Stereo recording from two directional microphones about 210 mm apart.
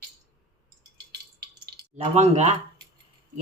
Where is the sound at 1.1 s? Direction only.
50° right (ahead or behind).